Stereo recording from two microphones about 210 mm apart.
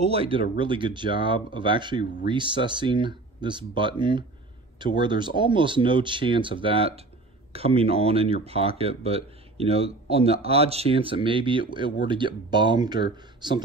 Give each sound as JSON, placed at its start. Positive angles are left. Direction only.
{"t": 0.0, "sound": "speech", "side_deg": -30}